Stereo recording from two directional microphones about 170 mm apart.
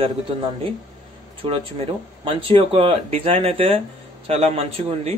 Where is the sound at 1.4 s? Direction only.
30° right (ahead or behind).